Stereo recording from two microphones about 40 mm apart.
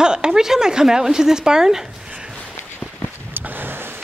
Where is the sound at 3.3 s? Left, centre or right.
Right.